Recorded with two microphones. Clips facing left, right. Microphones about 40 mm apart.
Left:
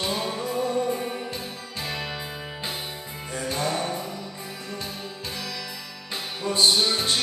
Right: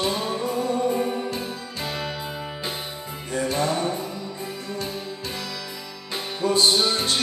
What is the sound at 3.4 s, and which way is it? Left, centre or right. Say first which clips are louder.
Music: right 5 dB; centre.